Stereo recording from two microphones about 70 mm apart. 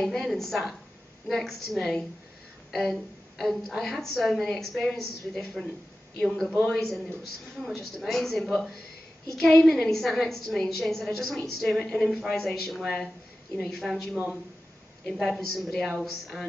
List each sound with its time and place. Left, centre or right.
0.0 s a woman's voice: centre
11.8 s a woman's voice: centre
14.1 s speech: centre
15.1 s a woman's voice: centre